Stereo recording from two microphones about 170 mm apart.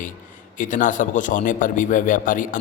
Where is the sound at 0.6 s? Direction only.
50° left (ahead or behind).